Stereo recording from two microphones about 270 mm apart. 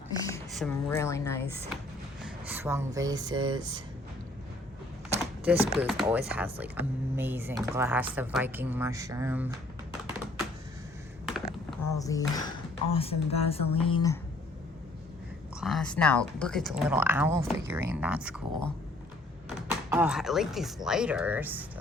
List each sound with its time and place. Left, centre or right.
0.2 s a sound: centre
0.5 s a woman's voice: centre
2.2 s speech: centre
5.5 s speech: centre
11.3 s typing: centre
11.8 s a sound: centre
12.3 s speech: centre
15.6 s speech: centre